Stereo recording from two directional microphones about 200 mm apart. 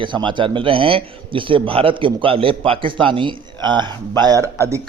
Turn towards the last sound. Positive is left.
turn(degrees=-15)  # may be behind; listen again after turning